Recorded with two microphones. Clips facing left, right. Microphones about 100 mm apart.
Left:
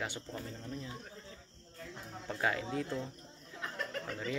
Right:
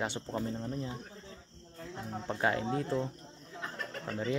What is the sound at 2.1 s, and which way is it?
Speech, 30° right (ahead or behind).